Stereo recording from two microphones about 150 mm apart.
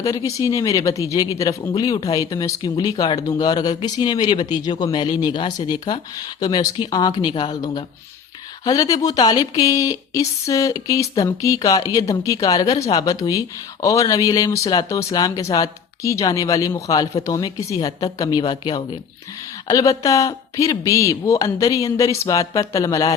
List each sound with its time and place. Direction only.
0.0 s speech: 25° left (ahead or behind)